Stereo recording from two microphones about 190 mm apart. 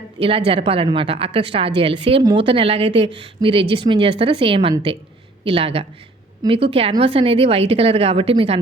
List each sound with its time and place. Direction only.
0.2 s a woman's voice: 30° right (ahead or behind)